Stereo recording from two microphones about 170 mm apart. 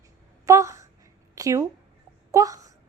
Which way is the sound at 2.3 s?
20° right (ahead or behind).